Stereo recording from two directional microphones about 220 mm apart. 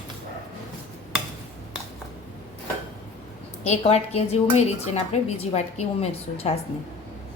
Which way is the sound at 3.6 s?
30° left (ahead or behind).